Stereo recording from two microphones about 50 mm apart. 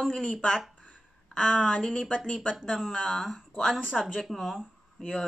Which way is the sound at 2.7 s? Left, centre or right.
Centre.